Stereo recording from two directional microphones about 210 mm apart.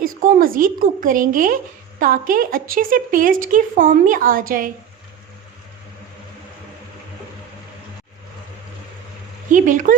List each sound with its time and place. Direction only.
0.0 s a woman's voice: 40° right (ahead or behind)
9.5 s a woman's voice: 40° right (ahead or behind)